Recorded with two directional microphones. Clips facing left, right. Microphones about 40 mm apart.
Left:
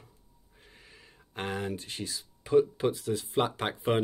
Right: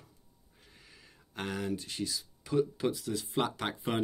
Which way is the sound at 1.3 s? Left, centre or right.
Left.